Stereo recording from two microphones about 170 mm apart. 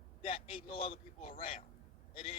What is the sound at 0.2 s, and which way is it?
A man's voice, 35° left (ahead or behind).